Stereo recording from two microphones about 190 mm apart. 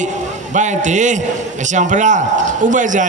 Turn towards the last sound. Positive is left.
turn(degrees=-40)  # may be behind; listen again after turning